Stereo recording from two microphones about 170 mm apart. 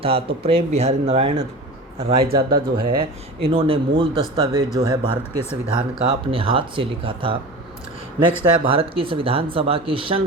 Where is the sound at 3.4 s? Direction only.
35° right (ahead or behind).